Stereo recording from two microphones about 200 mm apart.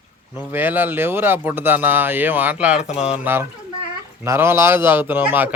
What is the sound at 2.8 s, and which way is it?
Speech, 35° left (ahead or behind).